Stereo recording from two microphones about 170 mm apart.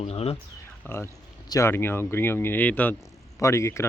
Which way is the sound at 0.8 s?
15° left (ahead or behind).